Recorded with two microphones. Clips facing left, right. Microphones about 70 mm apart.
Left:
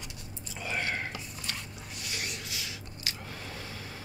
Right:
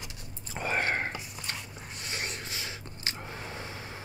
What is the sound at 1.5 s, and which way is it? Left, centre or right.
Dog, right.